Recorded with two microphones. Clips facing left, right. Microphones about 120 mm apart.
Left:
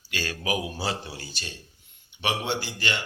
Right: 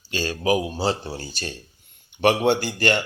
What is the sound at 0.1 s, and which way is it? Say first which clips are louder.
Speech: right 7 dB; 30° right (ahead or behind).